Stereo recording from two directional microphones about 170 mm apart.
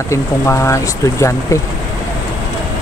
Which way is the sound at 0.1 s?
15° left (ahead or behind).